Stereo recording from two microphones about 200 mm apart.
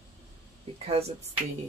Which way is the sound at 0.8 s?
30° right (ahead or behind).